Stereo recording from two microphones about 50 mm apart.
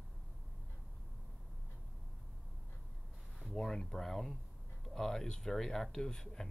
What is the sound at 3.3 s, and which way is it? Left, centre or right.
Speech, centre.